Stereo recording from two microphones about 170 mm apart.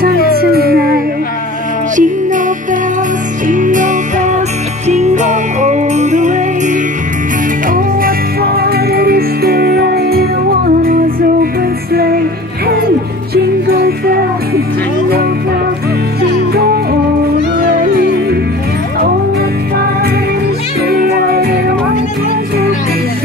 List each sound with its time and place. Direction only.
0.4 s howl: 65° right (ahead or behind)
2.0 s music: 50° right (ahead or behind)
7.7 s music: 60° right (ahead or behind)
17.6 s music: 60° right (ahead or behind)
20.9 s music: 60° right (ahead or behind)